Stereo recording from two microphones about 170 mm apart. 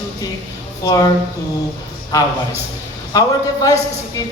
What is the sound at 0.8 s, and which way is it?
Speech, 20° left (ahead or behind).